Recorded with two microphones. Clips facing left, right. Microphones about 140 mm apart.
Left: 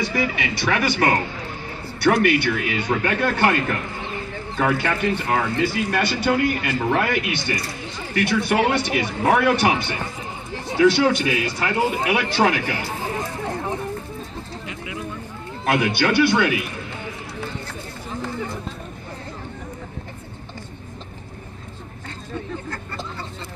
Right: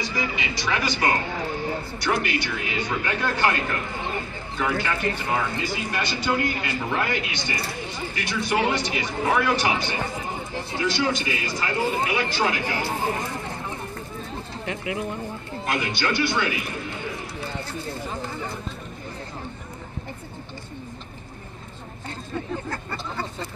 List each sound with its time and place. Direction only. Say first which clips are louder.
0.0 s speech: left 5 dB; 60° left (ahead or behind)
4.6 s a man's voice: left 4 dB; 60° left (ahead or behind)
15.6 s a man's voice: left 7 dB; 75° left (ahead or behind)